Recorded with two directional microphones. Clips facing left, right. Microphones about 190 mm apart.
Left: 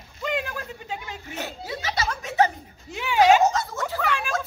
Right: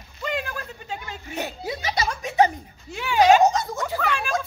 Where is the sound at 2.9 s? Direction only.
20° left (ahead or behind).